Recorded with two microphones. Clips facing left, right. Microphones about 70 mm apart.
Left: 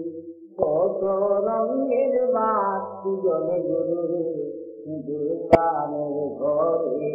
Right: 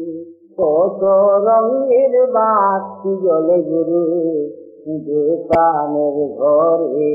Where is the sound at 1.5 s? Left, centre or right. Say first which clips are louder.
Right 9 dB; right.